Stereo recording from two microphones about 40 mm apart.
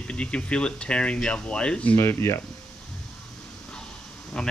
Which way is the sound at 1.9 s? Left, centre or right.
Left.